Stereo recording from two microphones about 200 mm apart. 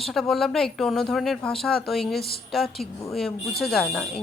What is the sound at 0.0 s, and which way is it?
A woman's voice, centre (ahead or behind).